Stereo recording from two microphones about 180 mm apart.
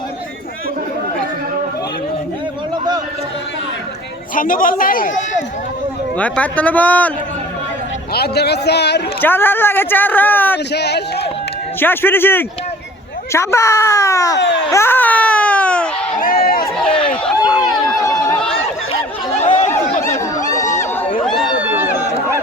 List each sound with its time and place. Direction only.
4.4 s speech: 50° left (ahead or behind)
6.1 s speech: 10° left (ahead or behind)
8.1 s a man's voice: 65° left (ahead or behind)
9.2 s speech: 10° left (ahead or behind)
10.7 s a man's voice: 65° left (ahead or behind)
11.8 s speech: 10° left (ahead or behind)
14.7 s baby cry: 15° left (ahead or behind)
16.2 s a sound: 55° left (ahead or behind)
17.2 s run: centre (ahead or behind)
18.0 s a sound: 20° left (ahead or behind)
19.4 s chatter: 40° left (ahead or behind)
20.1 s a sound: 20° left (ahead or behind)
21.2 s run: centre (ahead or behind)